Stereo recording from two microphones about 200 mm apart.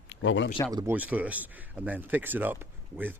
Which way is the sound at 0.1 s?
65° left (ahead or behind).